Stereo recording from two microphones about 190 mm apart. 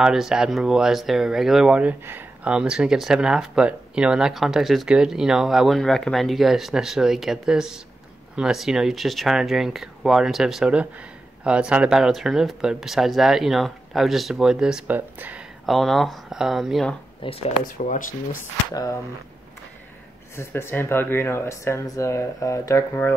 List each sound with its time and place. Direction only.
0.0 s speech: 5° right (ahead or behind)
17.2 s speech: 30° left (ahead or behind)
17.6 s speech: 45° left (ahead or behind)
18.7 s speech: 20° left (ahead or behind)
20.3 s speech: 15° left (ahead or behind)